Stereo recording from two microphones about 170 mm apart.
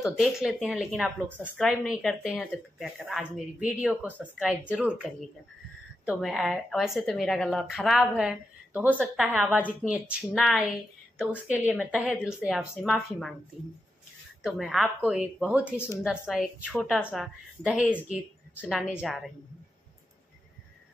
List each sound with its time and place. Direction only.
0.0 s a woman's voice: centre (ahead or behind)
6.0 s a woman's voice: centre (ahead or behind)
14.4 s a woman's voice: 5° right (ahead or behind)
16.9 s a woman's voice: centre (ahead or behind)